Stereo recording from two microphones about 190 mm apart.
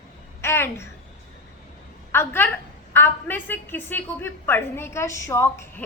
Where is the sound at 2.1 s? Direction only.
10° left (ahead or behind).